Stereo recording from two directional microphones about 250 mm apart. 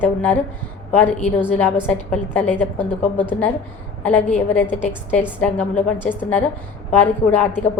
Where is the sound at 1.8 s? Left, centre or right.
Centre.